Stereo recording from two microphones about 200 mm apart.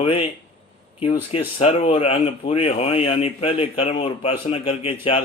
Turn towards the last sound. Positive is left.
turn(degrees=30)  # may be behind; listen again after turning